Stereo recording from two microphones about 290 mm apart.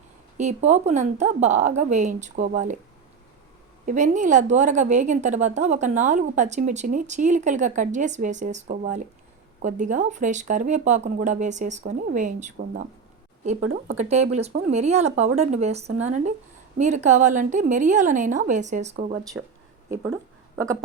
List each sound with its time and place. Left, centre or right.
0.3 s a woman's voice: right
3.8 s a woman's voice: right
19.9 s speech: centre